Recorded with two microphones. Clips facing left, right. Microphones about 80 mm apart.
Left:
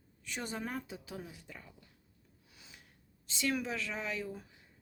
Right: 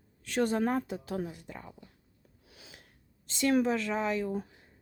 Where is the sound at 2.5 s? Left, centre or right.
Right.